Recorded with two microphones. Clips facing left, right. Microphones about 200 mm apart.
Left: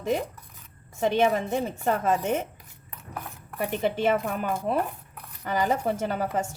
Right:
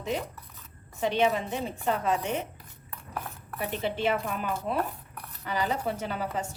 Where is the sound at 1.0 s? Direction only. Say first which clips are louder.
Left 3 dB; 50° left (ahead or behind).